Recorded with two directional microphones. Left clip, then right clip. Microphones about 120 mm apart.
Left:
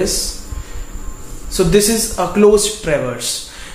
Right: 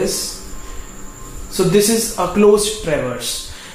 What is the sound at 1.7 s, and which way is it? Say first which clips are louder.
Speech: even; 10° left (ahead or behind).